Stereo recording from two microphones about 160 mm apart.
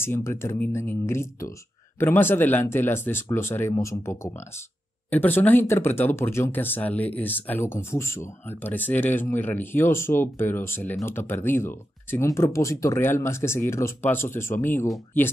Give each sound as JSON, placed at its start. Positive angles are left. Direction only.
{"t": 0.0, "sound": "speech", "side_deg": 15}